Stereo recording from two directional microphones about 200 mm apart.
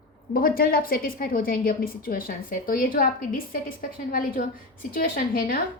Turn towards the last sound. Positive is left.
turn(degrees=45)  # may be behind; listen again after turning